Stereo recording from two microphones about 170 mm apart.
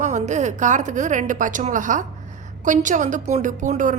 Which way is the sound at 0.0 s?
45° right (ahead or behind).